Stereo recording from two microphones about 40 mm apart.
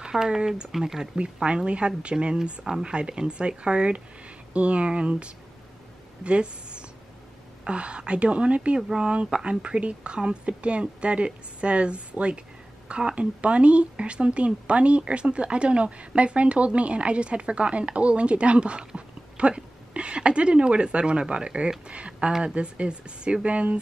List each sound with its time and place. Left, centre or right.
0.0 s speech: centre
1.1 s a woman's voice: right
8.7 s a woman's voice: centre